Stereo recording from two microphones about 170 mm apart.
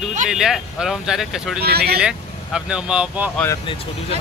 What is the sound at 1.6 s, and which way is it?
Speech, 70° right (ahead or behind).